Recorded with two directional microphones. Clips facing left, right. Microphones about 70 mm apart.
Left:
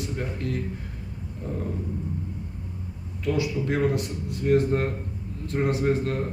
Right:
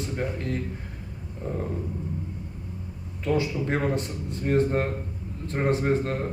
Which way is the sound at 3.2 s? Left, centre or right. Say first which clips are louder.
Even; right.